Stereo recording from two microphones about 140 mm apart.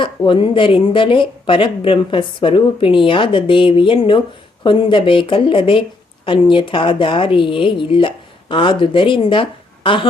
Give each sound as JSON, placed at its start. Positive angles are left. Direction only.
{"t": 0.0, "sound": "speech", "side_deg": 35}